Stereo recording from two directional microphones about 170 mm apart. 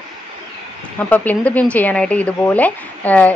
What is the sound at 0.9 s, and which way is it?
Speech, 10° left (ahead or behind).